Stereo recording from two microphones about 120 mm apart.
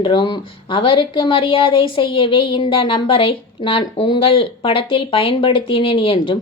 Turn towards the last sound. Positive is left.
turn(degrees=45)  # may be behind; listen again after turning